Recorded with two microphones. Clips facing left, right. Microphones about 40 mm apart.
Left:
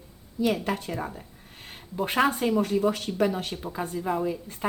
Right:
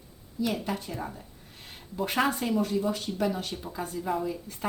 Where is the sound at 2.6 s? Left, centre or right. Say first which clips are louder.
Left 4 dB; left.